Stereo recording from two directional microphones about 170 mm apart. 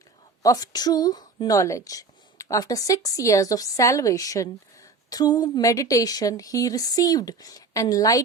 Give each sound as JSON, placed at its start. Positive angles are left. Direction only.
{"t": 0.4, "sound": "a woman's voice", "side_deg": 20}